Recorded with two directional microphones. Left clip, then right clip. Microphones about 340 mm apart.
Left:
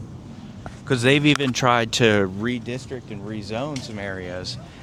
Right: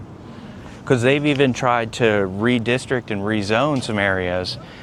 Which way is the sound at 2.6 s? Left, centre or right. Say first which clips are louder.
Right 11 dB; right.